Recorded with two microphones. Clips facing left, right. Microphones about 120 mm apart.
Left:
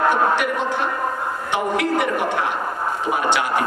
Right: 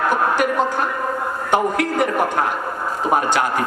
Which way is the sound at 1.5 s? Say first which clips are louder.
Right 2 dB; 45° right (ahead or behind).